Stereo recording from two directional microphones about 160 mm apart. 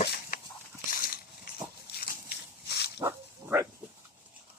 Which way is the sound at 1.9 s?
85° left.